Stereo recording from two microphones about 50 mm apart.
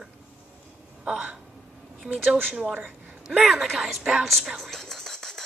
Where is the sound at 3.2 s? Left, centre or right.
Centre.